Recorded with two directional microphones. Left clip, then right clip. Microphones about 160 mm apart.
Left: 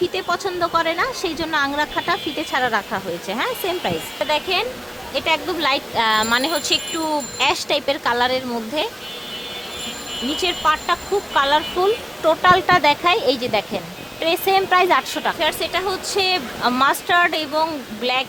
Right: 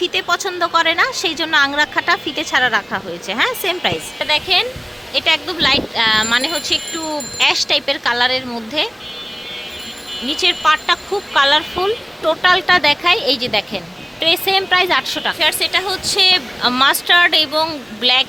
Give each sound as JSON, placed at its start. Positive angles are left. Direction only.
{"t": 0.0, "sound": "a woman's voice", "side_deg": -5}
{"t": 10.4, "sound": "a woman's voice", "side_deg": -5}
{"t": 11.8, "sound": "speech", "side_deg": 5}
{"t": 15.4, "sound": "a woman's voice", "side_deg": -5}